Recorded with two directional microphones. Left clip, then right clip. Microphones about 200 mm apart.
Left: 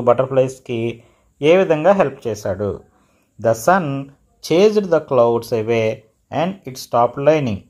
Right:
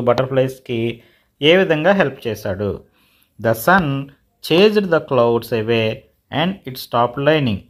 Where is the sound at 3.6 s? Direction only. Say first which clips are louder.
Right 1 dB; 15° right (ahead or behind).